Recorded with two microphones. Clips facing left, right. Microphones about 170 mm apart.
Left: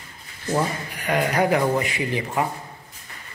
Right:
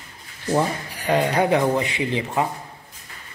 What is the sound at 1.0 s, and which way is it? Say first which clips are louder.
Speech: right 2 dB; 30° right (ahead or behind).